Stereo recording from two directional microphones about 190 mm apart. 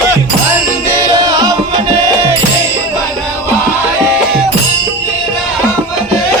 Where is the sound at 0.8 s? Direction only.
15° right (ahead or behind).